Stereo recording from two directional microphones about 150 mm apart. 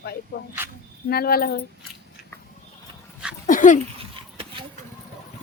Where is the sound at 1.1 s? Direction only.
90° left.